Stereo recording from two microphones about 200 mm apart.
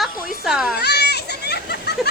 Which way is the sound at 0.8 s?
55° left (ahead or behind).